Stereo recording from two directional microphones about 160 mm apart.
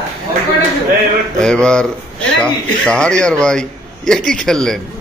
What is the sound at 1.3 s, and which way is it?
A man's voice, 5° left (ahead or behind).